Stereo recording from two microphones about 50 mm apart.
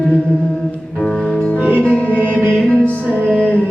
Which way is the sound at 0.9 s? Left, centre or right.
Centre.